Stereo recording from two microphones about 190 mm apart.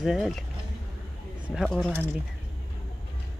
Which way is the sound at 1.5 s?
Centre (ahead or behind).